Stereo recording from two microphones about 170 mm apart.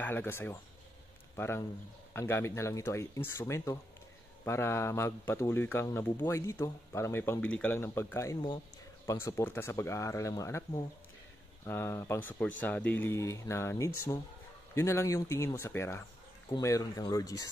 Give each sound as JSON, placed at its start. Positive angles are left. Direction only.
{"t": 0.0, "sound": "speech", "side_deg": 10}